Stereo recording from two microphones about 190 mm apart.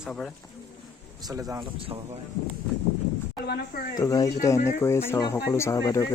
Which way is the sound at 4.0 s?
20° left (ahead or behind).